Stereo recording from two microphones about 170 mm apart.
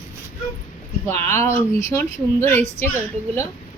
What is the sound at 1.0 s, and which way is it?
A woman's voice, 15° left (ahead or behind).